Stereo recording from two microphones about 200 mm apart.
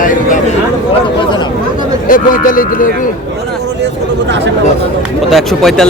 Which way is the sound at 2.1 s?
40° left (ahead or behind).